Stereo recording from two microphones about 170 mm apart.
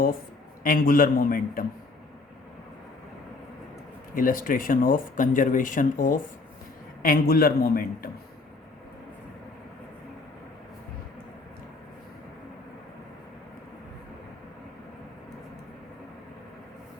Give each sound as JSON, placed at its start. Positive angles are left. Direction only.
{"t": 0.6, "sound": "a man's voice", "side_deg": 55}
{"t": 4.1, "sound": "a man's voice", "side_deg": 55}